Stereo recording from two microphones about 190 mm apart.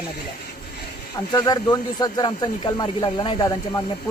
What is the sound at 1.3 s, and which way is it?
Speech, 20° left (ahead or behind).